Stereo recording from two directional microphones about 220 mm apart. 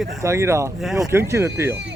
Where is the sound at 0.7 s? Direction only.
Centre (ahead or behind).